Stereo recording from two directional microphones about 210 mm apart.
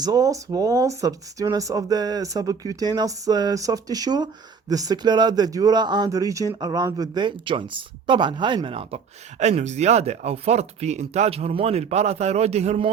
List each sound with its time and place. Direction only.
0.0 s speech: 15° right (ahead or behind)